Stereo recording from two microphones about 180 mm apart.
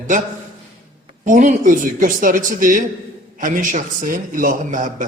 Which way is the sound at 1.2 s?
40° right (ahead or behind).